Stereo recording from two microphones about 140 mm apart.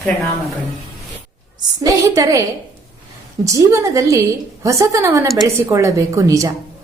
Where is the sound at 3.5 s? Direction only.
25° right (ahead or behind).